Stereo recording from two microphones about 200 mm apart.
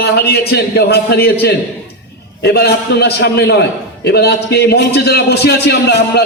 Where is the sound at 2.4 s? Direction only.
55° left (ahead or behind).